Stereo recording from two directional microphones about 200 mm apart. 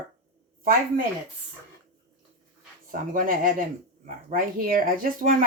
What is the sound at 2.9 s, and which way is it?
Speech, 45° right (ahead or behind).